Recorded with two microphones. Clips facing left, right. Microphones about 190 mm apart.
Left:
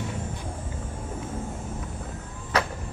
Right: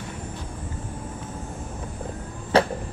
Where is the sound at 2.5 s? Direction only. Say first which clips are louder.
Right 7 dB; 30° right (ahead or behind).